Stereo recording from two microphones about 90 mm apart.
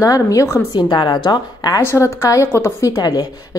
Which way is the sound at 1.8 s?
30° left (ahead or behind).